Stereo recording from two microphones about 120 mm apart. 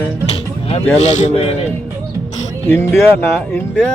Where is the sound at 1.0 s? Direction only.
70° left (ahead or behind).